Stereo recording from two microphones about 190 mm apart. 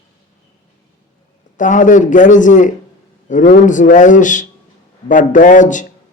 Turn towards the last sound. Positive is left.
turn(degrees=40)  # may be behind; listen again after turning